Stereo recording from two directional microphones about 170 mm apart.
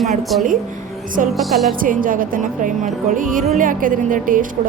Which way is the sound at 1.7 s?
55° right (ahead or behind).